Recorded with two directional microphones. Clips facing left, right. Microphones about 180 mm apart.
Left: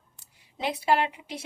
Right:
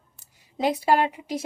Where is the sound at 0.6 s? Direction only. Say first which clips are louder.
Right 4 dB; 45° right (ahead or behind).